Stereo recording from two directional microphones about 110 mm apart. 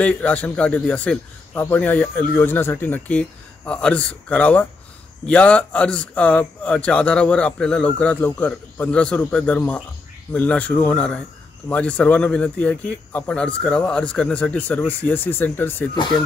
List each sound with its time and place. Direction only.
0.0 s a man's voice: 15° left (ahead or behind)
15.9 s speech: 40° left (ahead or behind)